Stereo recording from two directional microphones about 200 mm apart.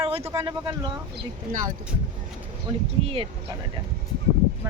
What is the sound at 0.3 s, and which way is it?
Speech, 25° right (ahead or behind).